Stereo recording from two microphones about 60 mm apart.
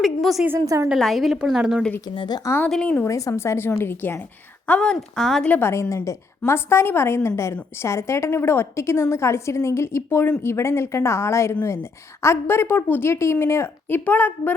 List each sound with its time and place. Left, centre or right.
0.0 s a woman's voice: centre
0.6 s a woman's voice: right
0.9 s a woman's voice: centre
2.5 s a woman's voice: left
3.3 s a woman's voice: left
4.8 s speech: centre
5.5 s a woman's voice: left
6.5 s a woman's voice: left
12.5 s speech: left